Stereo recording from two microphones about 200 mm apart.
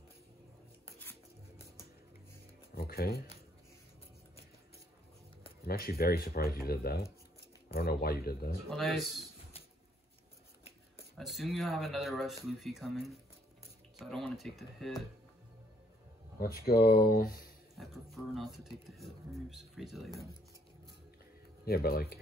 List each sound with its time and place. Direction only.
2.7 s shuffling cards: 50° left (ahead or behind)
5.7 s speech: 50° left (ahead or behind)
8.6 s speech: centre (ahead or behind)
11.1 s speech: centre (ahead or behind)
16.3 s speech: 50° left (ahead or behind)
17.7 s speech: centre (ahead or behind)
21.6 s speech: 50° left (ahead or behind)